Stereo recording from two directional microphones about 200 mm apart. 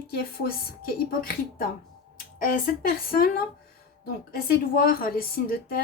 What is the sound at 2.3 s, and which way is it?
Speech, 45° left (ahead or behind).